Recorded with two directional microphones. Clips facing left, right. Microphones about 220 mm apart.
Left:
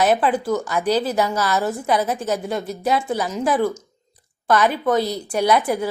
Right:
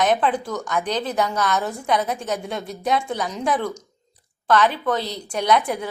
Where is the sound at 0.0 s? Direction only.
5° left (ahead or behind).